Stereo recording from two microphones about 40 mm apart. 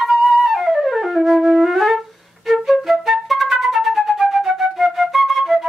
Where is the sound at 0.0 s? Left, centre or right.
Centre.